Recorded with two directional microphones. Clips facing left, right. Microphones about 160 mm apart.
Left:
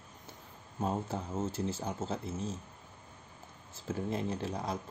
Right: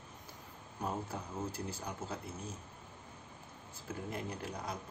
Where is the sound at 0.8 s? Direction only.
25° left (ahead or behind).